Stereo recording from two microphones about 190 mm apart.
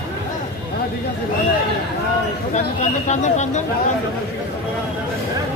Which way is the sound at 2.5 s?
40° left (ahead or behind).